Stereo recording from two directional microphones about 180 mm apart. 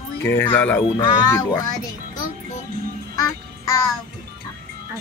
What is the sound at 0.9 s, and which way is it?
Child singing, 20° left (ahead or behind).